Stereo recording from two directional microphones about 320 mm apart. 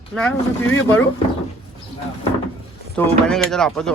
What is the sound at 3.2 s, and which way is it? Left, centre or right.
Speech, centre.